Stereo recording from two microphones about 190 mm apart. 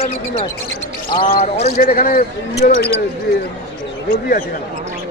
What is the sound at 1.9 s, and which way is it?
Speech, 50° left (ahead or behind).